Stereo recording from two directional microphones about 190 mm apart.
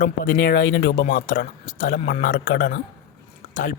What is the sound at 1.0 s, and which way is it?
Speech, 45° left (ahead or behind).